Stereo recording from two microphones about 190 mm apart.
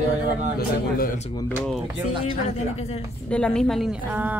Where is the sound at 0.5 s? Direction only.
50° left (ahead or behind).